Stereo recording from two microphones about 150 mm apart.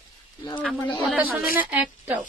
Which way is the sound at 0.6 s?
5° left (ahead or behind).